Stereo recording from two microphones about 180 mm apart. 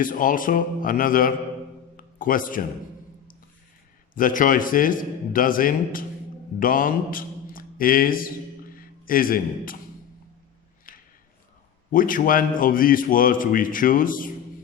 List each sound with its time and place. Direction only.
0.0 s a man's voice: 50° left (ahead or behind)
4.1 s a man's voice: 50° left (ahead or behind)
10.9 s a sound: 50° left (ahead or behind)
11.9 s a man's voice: 50° left (ahead or behind)